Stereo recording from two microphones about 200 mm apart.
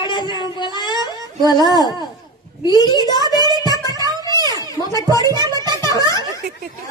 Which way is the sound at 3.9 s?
20° right (ahead or behind).